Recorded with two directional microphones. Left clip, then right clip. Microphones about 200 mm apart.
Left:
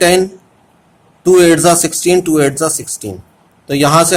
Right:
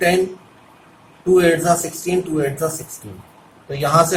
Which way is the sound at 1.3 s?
55° left (ahead or behind).